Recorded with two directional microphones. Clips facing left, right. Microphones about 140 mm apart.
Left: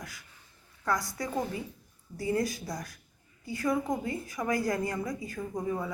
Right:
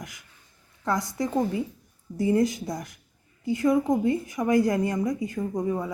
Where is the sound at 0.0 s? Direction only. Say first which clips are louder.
Right 3 dB; 20° right (ahead or behind).